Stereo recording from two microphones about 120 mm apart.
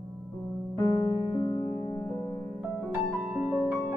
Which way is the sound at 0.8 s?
30° left (ahead or behind).